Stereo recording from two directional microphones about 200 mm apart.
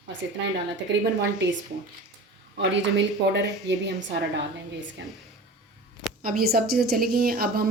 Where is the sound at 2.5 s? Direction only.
60° right (ahead or behind).